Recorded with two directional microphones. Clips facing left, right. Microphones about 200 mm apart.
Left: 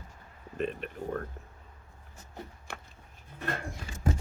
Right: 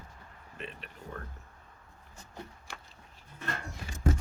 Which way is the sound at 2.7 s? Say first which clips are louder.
Left 4 dB; 60° left (ahead or behind).